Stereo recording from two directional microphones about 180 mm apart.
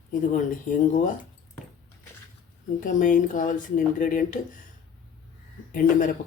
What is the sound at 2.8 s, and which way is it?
Speech, 45° left (ahead or behind).